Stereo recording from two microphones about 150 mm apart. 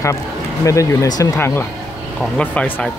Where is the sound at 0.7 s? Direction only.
25° left (ahead or behind).